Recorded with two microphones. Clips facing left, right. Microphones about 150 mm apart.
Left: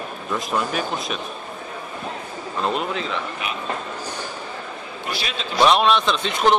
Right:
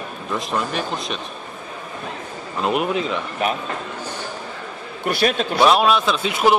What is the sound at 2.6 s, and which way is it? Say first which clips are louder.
Speech: right 4 dB; 15° right (ahead or behind).